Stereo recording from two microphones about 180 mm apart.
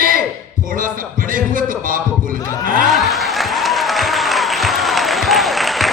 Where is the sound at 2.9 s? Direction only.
Centre (ahead or behind).